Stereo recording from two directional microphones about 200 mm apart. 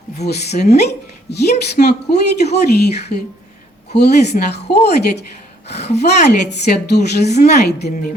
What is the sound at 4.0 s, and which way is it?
Speech, 55° left (ahead or behind).